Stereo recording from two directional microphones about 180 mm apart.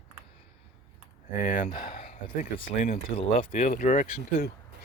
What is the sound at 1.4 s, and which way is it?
Speech, 50° left (ahead or behind).